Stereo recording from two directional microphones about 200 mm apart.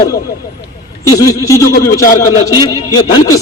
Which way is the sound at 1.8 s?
15° left (ahead or behind).